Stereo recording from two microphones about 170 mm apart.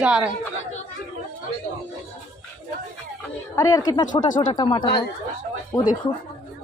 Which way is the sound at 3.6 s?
20° left (ahead or behind).